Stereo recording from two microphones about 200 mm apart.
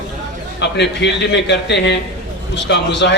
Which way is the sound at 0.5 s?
60° left (ahead or behind).